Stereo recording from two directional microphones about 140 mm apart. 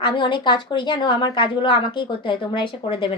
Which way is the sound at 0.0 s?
35° left (ahead or behind).